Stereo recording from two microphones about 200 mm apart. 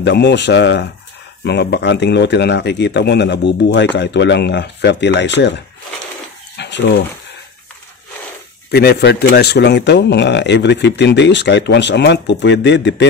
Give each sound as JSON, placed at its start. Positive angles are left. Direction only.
{"t": 0.0, "sound": "speech", "side_deg": 60}
{"t": 6.5, "sound": "bird", "side_deg": 60}
{"t": 8.7, "sound": "speech", "side_deg": 55}